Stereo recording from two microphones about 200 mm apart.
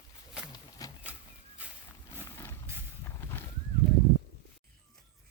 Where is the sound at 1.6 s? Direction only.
5° right (ahead or behind).